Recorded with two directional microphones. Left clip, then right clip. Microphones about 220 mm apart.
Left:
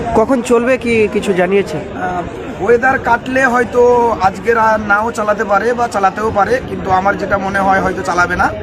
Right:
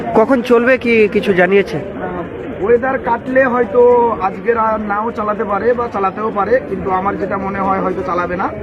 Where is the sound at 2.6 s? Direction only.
35° left (ahead or behind).